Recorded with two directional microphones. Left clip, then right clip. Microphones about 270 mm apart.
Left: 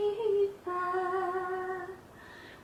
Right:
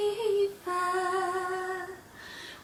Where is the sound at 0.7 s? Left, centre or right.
Centre.